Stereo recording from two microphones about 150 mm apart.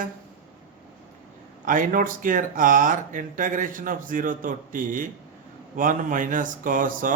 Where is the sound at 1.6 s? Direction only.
65° right (ahead or behind).